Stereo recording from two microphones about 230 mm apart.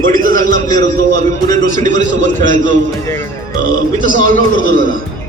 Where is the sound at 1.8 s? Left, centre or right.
Right.